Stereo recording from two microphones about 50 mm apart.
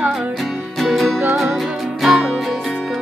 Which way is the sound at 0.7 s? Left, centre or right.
Centre.